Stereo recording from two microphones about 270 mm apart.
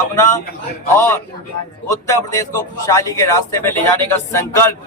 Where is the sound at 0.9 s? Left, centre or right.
Centre.